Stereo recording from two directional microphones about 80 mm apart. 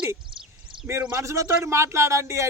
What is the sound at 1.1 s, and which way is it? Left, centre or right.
A man's voice, right.